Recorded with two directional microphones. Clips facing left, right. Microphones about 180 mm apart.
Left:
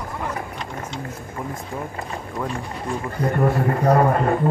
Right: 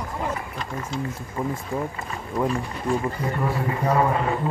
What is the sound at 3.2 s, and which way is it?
A man's voice, 55° left (ahead or behind).